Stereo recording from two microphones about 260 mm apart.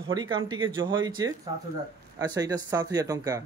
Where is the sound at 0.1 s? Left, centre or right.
Centre.